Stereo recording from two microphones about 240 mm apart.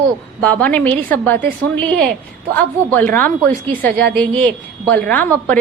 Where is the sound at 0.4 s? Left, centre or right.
Centre.